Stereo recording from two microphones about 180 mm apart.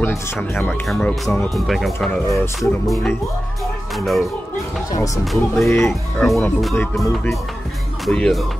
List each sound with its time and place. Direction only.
0.4 s speech: 10° left (ahead or behind)
2.0 s speech: 15° left (ahead or behind)
4.0 s speech: centre (ahead or behind)
4.9 s speech: 20° left (ahead or behind)
5.2 s speech: centre (ahead or behind)
5.7 s speech: 15° left (ahead or behind)
6.2 s speech: centre (ahead or behind)
8.0 s speech: centre (ahead or behind)